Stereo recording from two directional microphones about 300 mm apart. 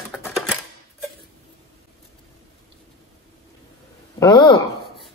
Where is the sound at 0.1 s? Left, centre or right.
Centre.